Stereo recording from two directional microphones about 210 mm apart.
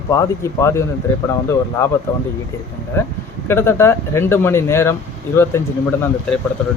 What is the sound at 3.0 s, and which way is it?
Speech, 15° left (ahead or behind).